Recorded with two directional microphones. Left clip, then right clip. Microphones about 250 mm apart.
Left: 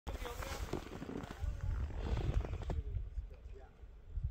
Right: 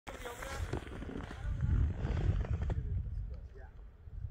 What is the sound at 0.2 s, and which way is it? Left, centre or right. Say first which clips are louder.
Vehicle: right 1 dB; centre.